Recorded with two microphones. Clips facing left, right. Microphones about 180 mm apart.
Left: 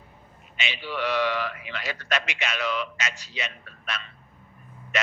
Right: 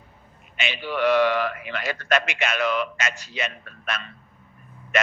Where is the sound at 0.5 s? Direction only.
50° right (ahead or behind).